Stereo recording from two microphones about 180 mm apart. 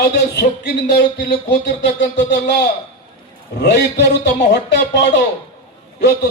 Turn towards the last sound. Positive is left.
turn(degrees=70)  # may be behind; listen again after turning